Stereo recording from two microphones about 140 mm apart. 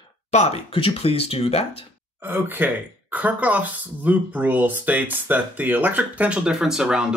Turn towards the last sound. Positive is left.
turn(degrees=-5)  # may be behind; listen again after turning